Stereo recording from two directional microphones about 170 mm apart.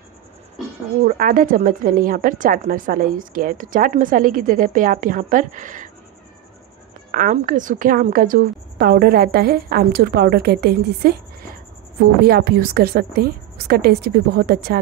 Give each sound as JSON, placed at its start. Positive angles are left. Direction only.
{"t": 1.0, "sound": "a woman's voice", "side_deg": -55}
{"t": 7.1, "sound": "a woman's voice", "side_deg": -50}